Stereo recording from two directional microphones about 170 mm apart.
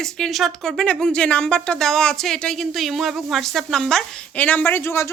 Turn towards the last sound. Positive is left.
turn(degrees=15)  # may be behind; listen again after turning